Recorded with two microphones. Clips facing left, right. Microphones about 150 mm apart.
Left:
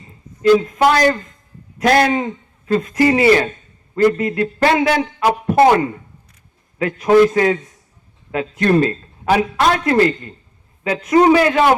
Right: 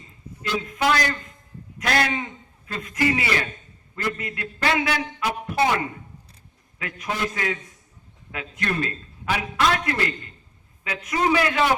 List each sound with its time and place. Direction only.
0.4 s a man's voice: 45° left (ahead or behind)
5.2 s a man's voice: 50° left (ahead or behind)
6.7 s a man's voice: 35° left (ahead or behind)